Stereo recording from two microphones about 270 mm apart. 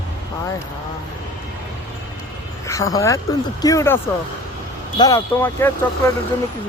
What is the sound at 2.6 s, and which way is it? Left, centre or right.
Speech, centre.